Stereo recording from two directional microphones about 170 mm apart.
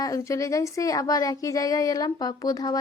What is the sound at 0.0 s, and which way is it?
Speech, 20° left (ahead or behind).